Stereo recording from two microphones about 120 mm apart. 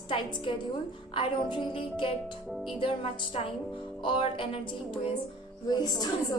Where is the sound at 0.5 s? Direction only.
45° left (ahead or behind).